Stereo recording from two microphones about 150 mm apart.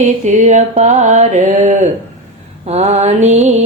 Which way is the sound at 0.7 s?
40° right (ahead or behind).